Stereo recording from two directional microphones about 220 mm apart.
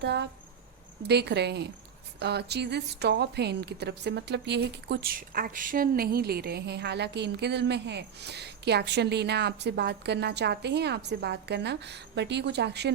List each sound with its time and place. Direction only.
0.0 s speech: 50° right (ahead or behind)